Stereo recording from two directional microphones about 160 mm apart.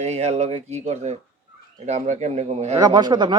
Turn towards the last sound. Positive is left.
turn(degrees=-25)  # may be behind; listen again after turning